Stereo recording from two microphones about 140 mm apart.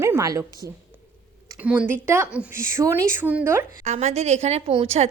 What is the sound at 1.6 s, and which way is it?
Speech, 10° right (ahead or behind).